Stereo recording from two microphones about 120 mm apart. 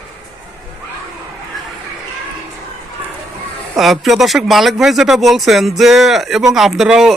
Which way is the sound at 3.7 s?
Centre (ahead or behind).